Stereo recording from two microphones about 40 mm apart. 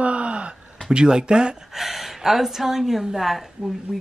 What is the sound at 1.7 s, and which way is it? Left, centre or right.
A woman's voice, centre.